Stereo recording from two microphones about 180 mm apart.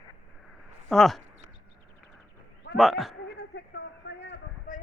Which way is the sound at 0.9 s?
Centre (ahead or behind).